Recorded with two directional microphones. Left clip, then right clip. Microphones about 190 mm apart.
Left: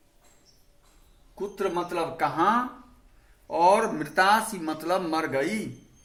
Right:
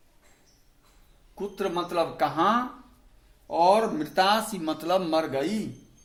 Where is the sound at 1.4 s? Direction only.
20° right (ahead or behind).